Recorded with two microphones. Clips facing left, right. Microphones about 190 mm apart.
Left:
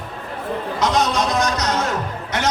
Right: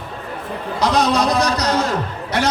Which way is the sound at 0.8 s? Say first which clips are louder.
Right 3 dB; 35° right (ahead or behind).